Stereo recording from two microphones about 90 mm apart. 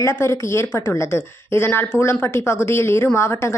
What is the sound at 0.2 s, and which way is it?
A woman's voice, 30° left (ahead or behind).